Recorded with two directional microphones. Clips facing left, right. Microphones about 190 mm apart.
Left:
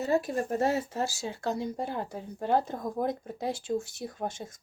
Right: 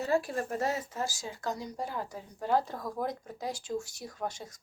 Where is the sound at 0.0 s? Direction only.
20° left (ahead or behind).